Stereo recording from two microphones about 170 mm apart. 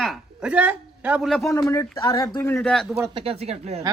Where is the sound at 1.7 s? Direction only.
20° left (ahead or behind).